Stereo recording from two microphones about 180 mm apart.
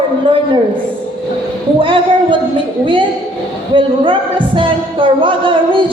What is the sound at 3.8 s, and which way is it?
Music, 30° right (ahead or behind).